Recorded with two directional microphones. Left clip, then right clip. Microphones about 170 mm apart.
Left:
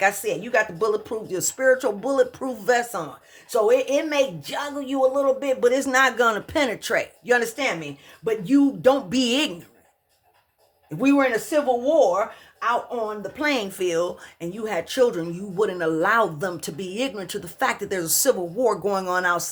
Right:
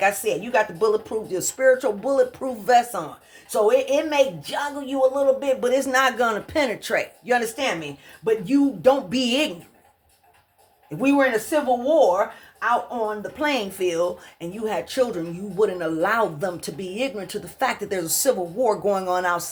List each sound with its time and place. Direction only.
0.0 s speech: 30° left (ahead or behind)
10.8 s speech: 30° left (ahead or behind)